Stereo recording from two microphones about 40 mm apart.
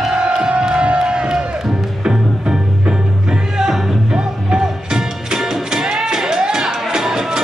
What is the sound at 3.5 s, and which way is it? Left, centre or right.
Music, centre.